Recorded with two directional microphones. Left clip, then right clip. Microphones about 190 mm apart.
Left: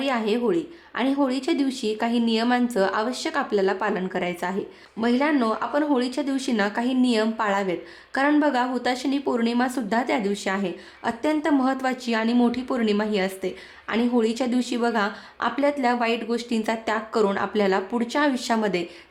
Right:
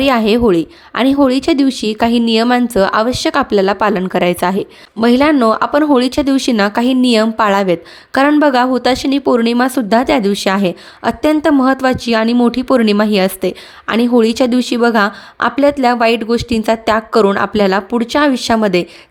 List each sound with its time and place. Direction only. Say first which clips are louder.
0.0 s a woman's voice: right 12 dB; 45° right (ahead or behind)